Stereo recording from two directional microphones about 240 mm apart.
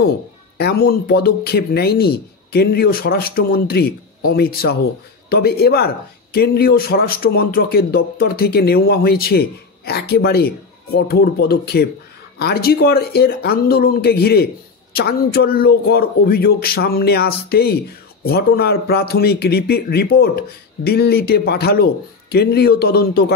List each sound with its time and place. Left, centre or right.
0.6 s speech: left